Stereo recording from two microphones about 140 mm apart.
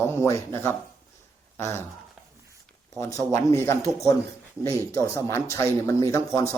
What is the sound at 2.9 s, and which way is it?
Speech, 20° left (ahead or behind).